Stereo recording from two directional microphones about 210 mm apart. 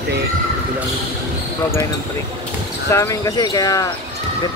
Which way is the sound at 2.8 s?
15° left (ahead or behind).